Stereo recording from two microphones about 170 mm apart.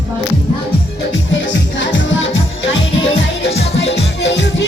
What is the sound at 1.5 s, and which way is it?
Music, 90° left.